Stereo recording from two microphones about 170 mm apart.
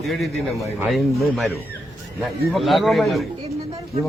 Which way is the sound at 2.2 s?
Centre (ahead or behind).